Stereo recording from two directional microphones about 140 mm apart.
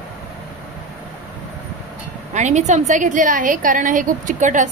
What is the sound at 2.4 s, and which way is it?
A woman's voice, 55° right (ahead or behind).